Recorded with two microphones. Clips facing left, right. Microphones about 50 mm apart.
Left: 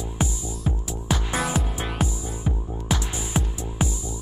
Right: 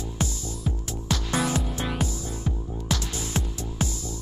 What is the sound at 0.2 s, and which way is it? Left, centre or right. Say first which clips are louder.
Music: left 3 dB; centre.